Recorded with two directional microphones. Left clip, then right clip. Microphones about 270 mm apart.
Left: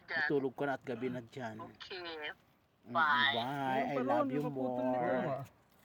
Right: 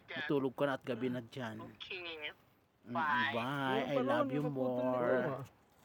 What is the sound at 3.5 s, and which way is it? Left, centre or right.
A man's voice, centre.